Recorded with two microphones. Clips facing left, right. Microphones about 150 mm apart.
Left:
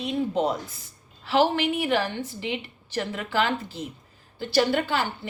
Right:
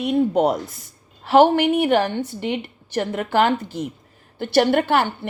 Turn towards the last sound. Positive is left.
turn(degrees=-60)  # may be behind; listen again after turning